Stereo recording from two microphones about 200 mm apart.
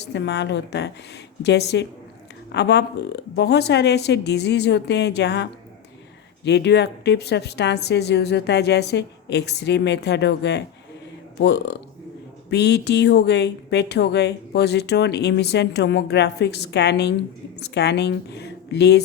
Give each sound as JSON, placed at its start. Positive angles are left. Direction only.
{"t": 0.1, "sound": "speech", "side_deg": 60}